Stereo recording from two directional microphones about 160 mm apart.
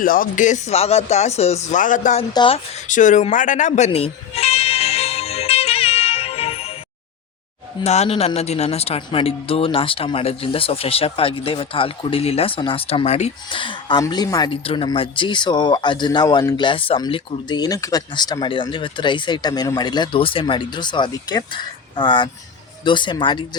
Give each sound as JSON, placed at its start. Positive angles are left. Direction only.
{"t": 0.0, "sound": "speech", "side_deg": 60}
{"t": 2.3, "sound": "speech", "side_deg": 30}
{"t": 2.8, "sound": "music", "side_deg": 55}
{"t": 7.9, "sound": "speech", "side_deg": 40}
{"t": 14.5, "sound": "speech", "side_deg": 35}